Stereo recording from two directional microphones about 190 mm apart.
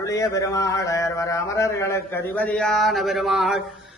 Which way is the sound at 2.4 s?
5° left (ahead or behind).